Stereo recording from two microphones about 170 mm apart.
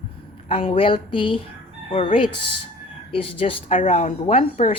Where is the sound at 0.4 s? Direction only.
35° left (ahead or behind).